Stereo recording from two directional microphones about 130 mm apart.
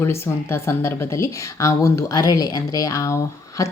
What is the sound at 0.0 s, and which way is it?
A woman's voice, 20° left (ahead or behind).